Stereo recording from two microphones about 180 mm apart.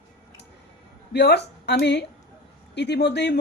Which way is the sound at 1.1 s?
70° left (ahead or behind).